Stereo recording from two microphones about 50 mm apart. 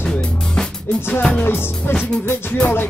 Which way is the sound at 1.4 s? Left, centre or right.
Left.